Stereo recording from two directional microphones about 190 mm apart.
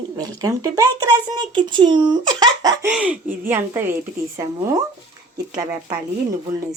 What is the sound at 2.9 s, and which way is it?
Speech, 5° right (ahead or behind).